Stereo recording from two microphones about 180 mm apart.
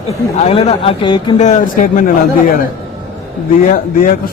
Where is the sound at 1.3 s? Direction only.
40° left (ahead or behind).